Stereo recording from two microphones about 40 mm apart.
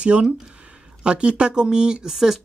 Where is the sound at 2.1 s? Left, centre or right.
Centre.